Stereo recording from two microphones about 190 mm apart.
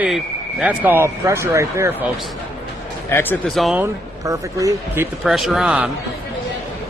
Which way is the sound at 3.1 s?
15° left (ahead or behind).